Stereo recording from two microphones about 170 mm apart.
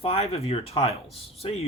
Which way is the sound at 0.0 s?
35° left (ahead or behind).